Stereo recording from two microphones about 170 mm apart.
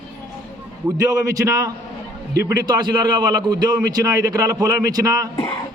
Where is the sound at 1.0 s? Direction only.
20° right (ahead or behind).